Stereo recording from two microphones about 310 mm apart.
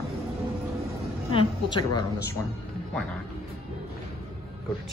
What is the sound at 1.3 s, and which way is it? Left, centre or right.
Speech, centre.